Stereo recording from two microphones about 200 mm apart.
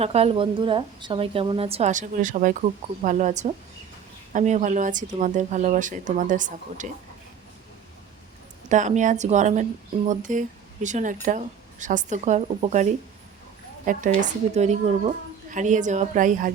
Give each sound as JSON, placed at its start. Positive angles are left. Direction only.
{"t": 0.0, "sound": "a woman's voice", "side_deg": -30}
{"t": 8.7, "sound": "a woman's voice", "side_deg": -40}